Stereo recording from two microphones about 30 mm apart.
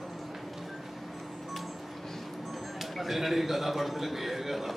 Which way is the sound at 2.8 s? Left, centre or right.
Centre.